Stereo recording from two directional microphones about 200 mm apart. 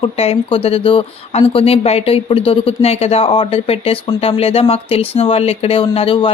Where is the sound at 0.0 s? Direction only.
30° left (ahead or behind).